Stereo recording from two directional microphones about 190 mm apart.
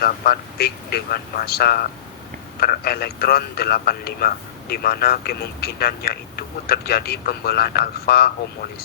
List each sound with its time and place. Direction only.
0.0 s a man's voice: 55° left (ahead or behind)